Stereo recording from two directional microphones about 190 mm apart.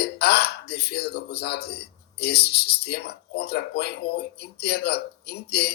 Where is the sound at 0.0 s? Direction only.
60° left (ahead or behind).